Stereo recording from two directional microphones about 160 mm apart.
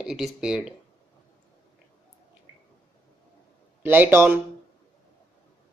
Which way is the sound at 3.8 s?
15° right (ahead or behind).